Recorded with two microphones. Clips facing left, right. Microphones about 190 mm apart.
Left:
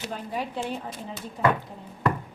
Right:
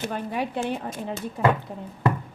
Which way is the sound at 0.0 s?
60° right (ahead or behind).